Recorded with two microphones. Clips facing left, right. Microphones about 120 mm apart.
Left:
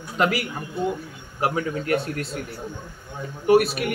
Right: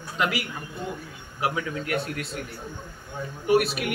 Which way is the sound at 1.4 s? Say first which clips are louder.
Left 4 dB; 45° left (ahead or behind).